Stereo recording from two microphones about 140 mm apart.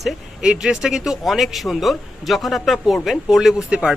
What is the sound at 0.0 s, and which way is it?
Speech, 5° right (ahead or behind).